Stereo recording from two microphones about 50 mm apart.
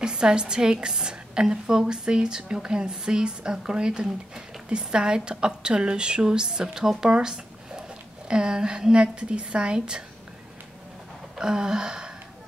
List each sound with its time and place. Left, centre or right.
0.0 s a woman's voice: centre
11.3 s a woman's voice: centre